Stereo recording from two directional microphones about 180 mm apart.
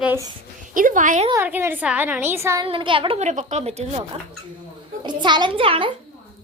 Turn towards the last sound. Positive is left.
turn(degrees=-30)  # may be behind; listen again after turning